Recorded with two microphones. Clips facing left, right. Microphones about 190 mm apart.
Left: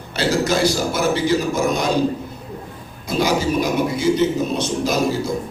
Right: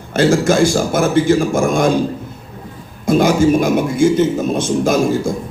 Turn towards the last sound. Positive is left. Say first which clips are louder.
# right 5 dB
turn(degrees=-50)  # may be behind; listen again after turning